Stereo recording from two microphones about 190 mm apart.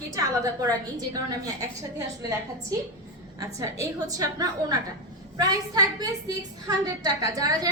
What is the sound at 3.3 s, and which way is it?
A woman's voice, 20° right (ahead or behind).